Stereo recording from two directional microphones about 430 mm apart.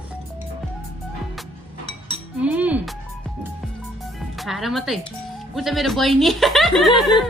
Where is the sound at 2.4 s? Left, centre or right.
Centre.